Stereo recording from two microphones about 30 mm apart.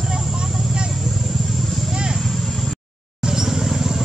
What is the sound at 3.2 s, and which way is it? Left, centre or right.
Vehicle, centre.